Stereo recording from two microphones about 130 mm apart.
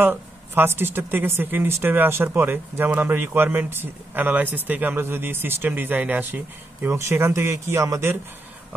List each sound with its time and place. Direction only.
0.0 s speech: 15° right (ahead or behind)